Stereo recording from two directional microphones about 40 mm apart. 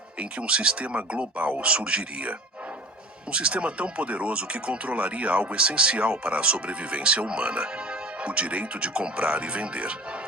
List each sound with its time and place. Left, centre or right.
0.2 s speech: right
3.3 s speech: right